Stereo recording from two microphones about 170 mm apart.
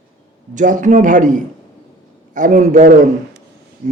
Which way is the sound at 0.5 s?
50° right (ahead or behind).